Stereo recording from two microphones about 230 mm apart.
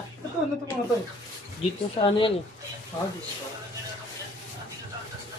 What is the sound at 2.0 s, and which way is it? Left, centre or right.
Speech, left.